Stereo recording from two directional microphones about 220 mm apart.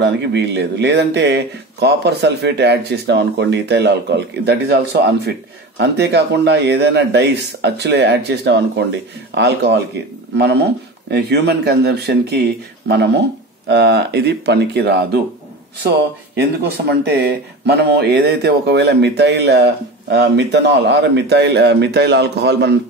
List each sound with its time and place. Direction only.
0.0 s speech: 50° right (ahead or behind)
16.6 s speech: 45° right (ahead or behind)